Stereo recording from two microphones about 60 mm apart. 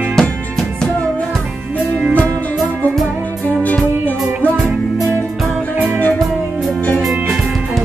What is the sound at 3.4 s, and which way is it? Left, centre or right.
Music, left.